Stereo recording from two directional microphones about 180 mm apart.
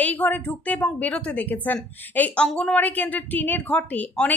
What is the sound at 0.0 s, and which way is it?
Speech, 10° left (ahead or behind).